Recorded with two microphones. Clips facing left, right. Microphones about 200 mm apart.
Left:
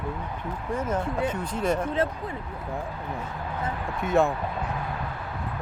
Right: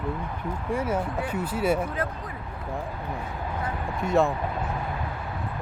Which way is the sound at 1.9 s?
25° left (ahead or behind).